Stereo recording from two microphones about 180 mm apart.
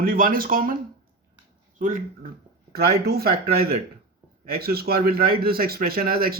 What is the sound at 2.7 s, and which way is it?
A man's voice, 60° right (ahead or behind).